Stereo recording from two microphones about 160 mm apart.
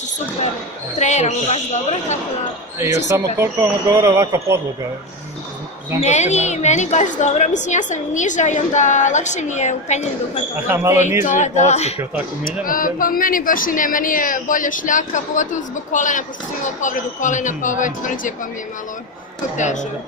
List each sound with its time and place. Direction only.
0.9 s a woman's voice: 45° left (ahead or behind)
3.1 s speech: 20° right (ahead or behind)
5.9 s a woman's voice: 45° left (ahead or behind)
10.7 s speech: 15° right (ahead or behind)
11.2 s a woman's voice: 50° left (ahead or behind)
12.6 s speech: 60° left (ahead or behind)
19.5 s a woman's voice: 50° left (ahead or behind)